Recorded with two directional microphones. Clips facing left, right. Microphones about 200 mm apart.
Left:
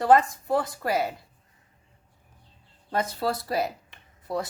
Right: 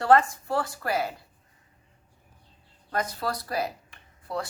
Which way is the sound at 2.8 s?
25° left (ahead or behind).